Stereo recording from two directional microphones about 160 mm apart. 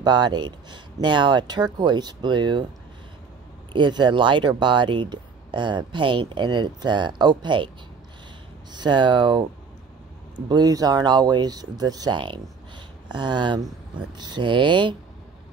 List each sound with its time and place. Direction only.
0.0 s speech: 25° right (ahead or behind)
3.7 s speech: 30° right (ahead or behind)
8.7 s speech: 30° right (ahead or behind)
10.5 s speech: 25° right (ahead or behind)